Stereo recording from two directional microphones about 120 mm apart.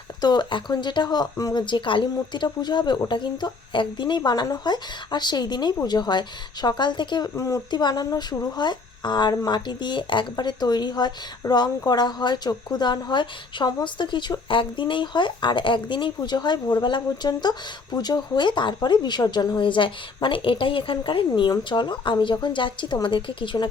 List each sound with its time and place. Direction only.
0.2 s a woman's voice: 40° left (ahead or behind)
1.6 s a woman's voice: 40° left (ahead or behind)
7.3 s speech: 25° left (ahead or behind)
7.7 s a woman's voice: 35° left (ahead or behind)